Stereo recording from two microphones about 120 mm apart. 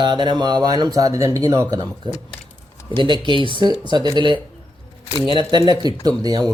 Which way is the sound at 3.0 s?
40° right (ahead or behind).